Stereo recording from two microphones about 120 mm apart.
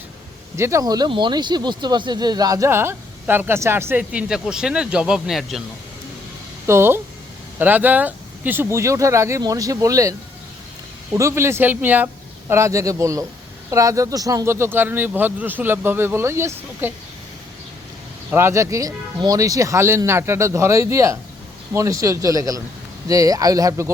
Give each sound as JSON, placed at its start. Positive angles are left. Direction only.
{"t": 0.5, "sound": "speech", "side_deg": -25}
{"t": 6.7, "sound": "speech", "side_deg": -20}
{"t": 18.3, "sound": "speech", "side_deg": -20}